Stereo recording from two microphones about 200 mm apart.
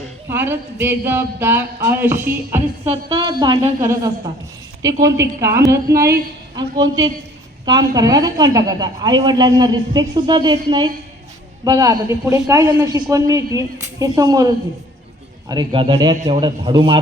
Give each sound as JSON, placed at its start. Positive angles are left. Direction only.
{"t": 0.3, "sound": "a man's voice", "side_deg": -10}